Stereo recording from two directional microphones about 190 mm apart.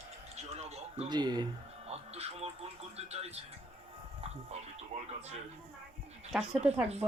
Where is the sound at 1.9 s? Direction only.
30° right (ahead or behind).